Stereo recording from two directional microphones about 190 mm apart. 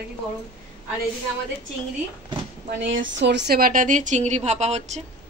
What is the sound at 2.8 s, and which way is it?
A woman's voice, 70° right (ahead or behind).